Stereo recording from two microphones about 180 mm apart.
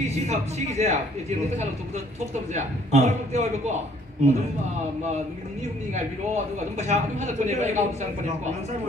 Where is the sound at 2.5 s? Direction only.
40° right (ahead or behind).